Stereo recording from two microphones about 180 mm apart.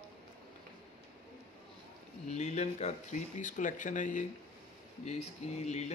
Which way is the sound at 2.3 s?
40° left (ahead or behind).